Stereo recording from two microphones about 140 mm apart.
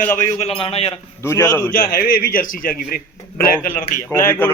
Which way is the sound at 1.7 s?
90° left.